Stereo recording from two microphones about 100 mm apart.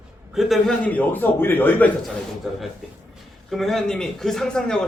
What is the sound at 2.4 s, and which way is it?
A man's voice, centre (ahead or behind).